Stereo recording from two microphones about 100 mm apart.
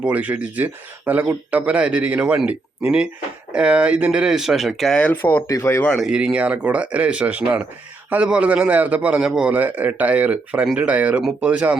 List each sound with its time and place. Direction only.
0.0 s speech: 15° right (ahead or behind)
4.9 s speech: 15° left (ahead or behind)
5.5 s speech: 30° left (ahead or behind)
6.0 s speech: 10° right (ahead or behind)